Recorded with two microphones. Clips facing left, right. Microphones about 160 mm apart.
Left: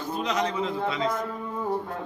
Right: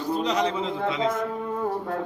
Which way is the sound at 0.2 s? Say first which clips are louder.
Even; 30° right (ahead or behind).